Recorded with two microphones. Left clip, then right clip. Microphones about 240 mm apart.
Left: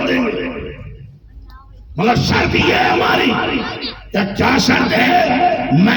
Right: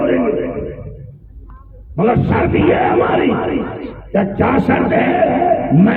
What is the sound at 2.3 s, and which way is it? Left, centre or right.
Music, left.